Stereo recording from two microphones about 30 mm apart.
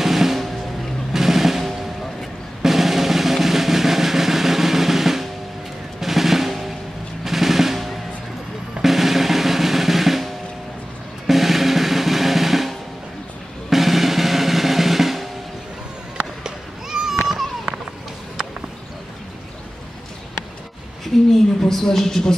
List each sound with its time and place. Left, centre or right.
0.0 s vehicle: centre
1.1 s music: centre
2.6 s drum roll: centre
5.9 s drum: centre
7.2 s music: centre
8.8 s drum roll: centre
11.2 s drum: centre
16.2 s a sound: right
17.1 s a sound: centre
21.3 s a sound: centre